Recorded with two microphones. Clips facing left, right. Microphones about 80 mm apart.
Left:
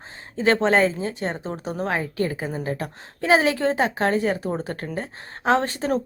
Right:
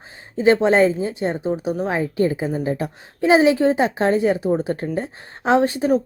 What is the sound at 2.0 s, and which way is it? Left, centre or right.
Speech, right.